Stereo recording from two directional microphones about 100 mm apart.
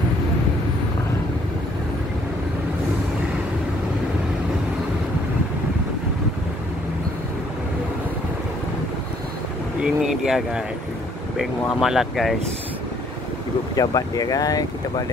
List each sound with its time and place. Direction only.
9.8 s a sound: 5° right (ahead or behind)
11.3 s speech: 5° right (ahead or behind)
13.7 s speech: 35° left (ahead or behind)